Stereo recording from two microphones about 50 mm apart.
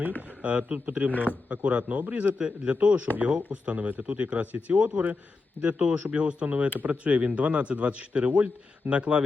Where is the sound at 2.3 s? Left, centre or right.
Centre.